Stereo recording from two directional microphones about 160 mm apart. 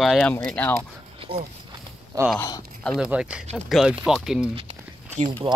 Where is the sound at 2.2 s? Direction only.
20° right (ahead or behind).